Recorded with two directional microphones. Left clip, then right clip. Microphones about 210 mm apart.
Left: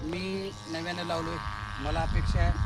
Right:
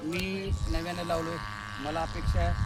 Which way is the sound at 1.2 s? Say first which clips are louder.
Even; 55° right (ahead or behind).